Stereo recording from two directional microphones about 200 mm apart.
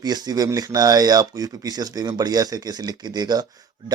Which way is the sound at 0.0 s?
20° right (ahead or behind).